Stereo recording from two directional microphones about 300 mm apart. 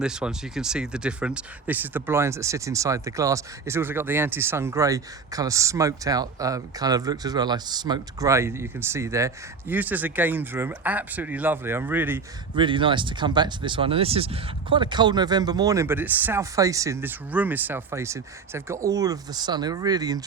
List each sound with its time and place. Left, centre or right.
0.0 s speech: centre